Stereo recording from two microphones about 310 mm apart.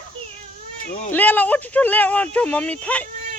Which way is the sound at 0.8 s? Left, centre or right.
Left.